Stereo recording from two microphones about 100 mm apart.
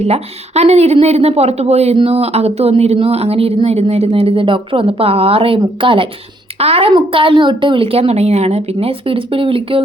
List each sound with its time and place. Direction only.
0.0 s speech: 90° right; by 6.1 s 60° right (ahead or behind)
6.6 s a woman's voice: 85° right
6.9 s speech: 60° right (ahead or behind)